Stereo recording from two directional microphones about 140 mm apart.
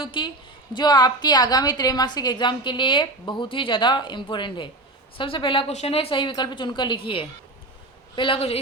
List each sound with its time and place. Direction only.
0.0 s a woman's voice: 35° left (ahead or behind)